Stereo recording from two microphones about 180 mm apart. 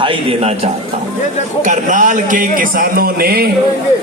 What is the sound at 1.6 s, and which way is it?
A man's voice, 45° right (ahead or behind).